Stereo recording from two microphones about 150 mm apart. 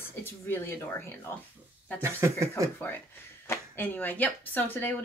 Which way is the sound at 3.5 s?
15° left (ahead or behind).